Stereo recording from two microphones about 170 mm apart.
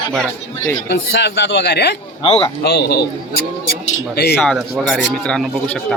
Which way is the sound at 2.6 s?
65° left (ahead or behind).